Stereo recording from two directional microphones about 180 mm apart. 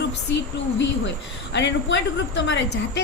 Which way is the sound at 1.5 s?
80° left.